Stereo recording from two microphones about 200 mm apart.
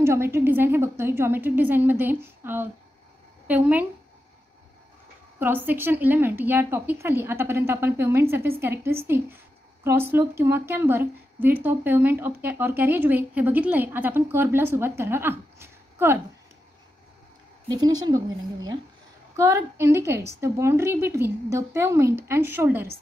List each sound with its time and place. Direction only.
0.0 s speech: 15° right (ahead or behind)
5.4 s speech: 10° right (ahead or behind)
17.6 s a woman's voice: 20° right (ahead or behind)